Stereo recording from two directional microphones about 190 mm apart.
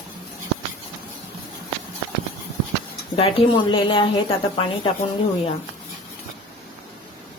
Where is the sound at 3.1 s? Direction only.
30° left (ahead or behind).